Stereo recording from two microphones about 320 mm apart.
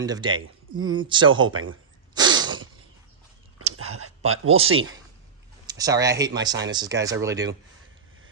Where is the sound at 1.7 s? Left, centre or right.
Centre.